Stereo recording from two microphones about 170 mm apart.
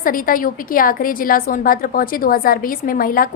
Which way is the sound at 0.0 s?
55° left (ahead or behind).